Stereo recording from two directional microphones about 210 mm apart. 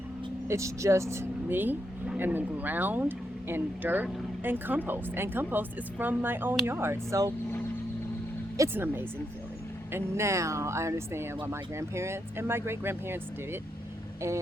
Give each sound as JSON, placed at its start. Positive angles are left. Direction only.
{"t": 0.4, "sound": "a woman's voice", "side_deg": -15}
{"t": 8.5, "sound": "a woman's voice", "side_deg": -10}